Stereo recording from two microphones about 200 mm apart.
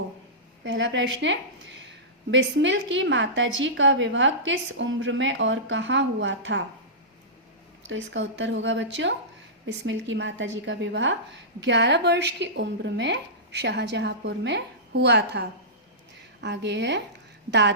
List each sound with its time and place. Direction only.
0.6 s a woman's voice: 65° right (ahead or behind)
7.9 s a woman's voice: 65° right (ahead or behind)